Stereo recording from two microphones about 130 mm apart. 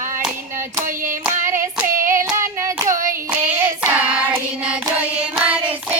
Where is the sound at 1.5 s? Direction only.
20° right (ahead or behind).